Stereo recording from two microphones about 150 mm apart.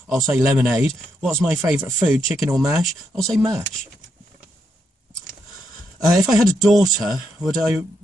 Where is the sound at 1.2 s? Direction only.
Centre (ahead or behind).